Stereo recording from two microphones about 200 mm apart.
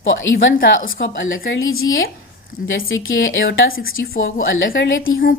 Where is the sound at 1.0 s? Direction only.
70° left (ahead or behind).